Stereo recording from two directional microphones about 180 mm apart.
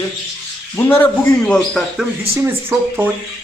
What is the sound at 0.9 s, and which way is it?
Speech, 10° left (ahead or behind).